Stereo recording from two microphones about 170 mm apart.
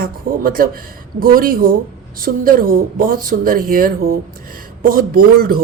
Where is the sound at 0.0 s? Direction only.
60° right (ahead or behind).